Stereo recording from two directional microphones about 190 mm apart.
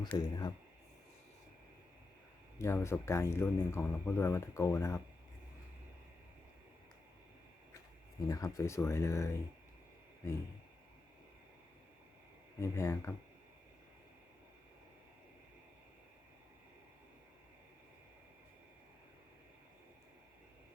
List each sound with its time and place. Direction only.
0.0 s speech: 20° left (ahead or behind)
2.6 s speech: 15° left (ahead or behind)
8.3 s speech: 15° left (ahead or behind)
12.5 s speech: 15° left (ahead or behind)